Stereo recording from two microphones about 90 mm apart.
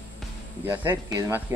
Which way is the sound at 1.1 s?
35° right (ahead or behind).